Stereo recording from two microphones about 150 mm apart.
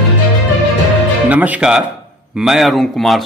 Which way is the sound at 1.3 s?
10° right (ahead or behind).